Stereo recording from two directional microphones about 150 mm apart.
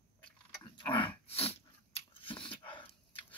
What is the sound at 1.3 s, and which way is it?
Dog, 40° left (ahead or behind).